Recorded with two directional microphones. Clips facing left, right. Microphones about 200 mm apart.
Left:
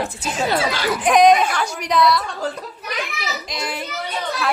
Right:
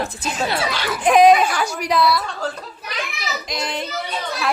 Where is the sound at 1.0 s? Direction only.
5° right (ahead or behind).